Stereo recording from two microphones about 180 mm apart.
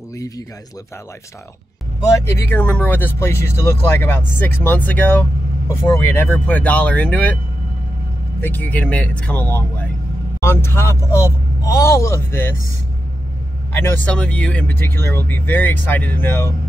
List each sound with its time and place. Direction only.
2.2 s speech: 10° left (ahead or behind)
8.4 s speech: 10° left (ahead or behind)
13.7 s speech: 10° left (ahead or behind)